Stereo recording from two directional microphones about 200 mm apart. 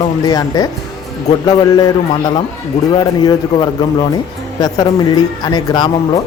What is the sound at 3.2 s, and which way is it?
Speech, 20° left (ahead or behind).